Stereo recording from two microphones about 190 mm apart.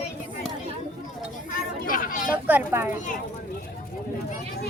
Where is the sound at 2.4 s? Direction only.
10° right (ahead or behind).